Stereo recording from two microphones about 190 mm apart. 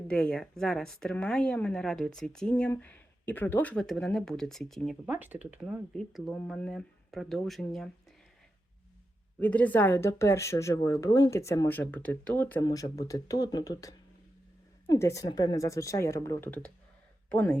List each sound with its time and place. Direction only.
0.1 s speech: 5° left (ahead or behind)
5.1 s speech: 10° right (ahead or behind)
9.4 s a woman's voice: 10° left (ahead or behind)